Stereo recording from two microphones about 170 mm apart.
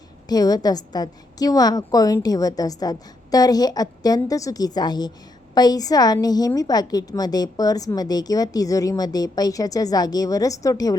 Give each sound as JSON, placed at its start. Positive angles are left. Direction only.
{"t": 0.3, "sound": "a woman's voice", "side_deg": 20}